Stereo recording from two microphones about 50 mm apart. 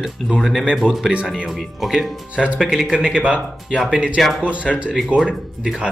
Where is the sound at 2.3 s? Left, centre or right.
Right.